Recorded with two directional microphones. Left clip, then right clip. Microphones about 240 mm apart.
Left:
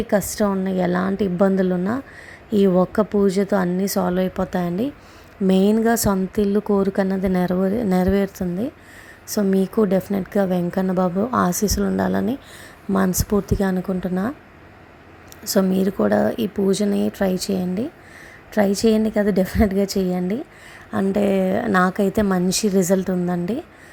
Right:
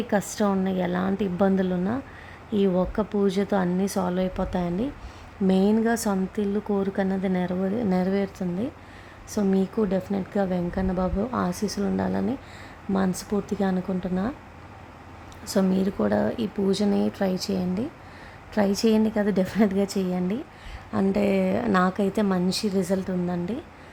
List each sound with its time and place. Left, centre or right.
0.1 s a woman's voice: centre
15.5 s a woman's voice: centre